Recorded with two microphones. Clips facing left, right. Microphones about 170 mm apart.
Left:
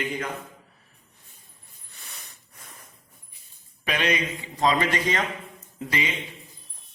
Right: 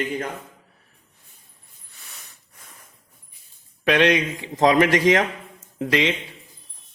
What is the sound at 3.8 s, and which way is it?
A man's voice, 80° right.